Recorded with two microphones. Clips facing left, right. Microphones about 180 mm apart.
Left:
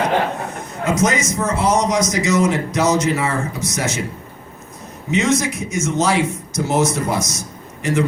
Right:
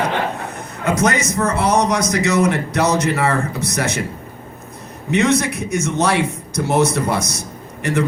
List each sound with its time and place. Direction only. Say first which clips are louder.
0.9 s speech: right 1 dB; 60° right (ahead or behind)
5.1 s speech: right 2 dB; 60° right (ahead or behind)